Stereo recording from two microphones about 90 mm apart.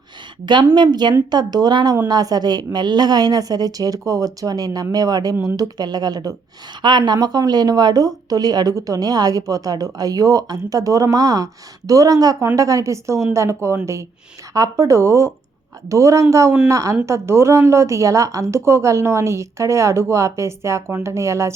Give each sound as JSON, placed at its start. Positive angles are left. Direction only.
{"t": 0.7, "sound": "a woman's voice", "side_deg": -55}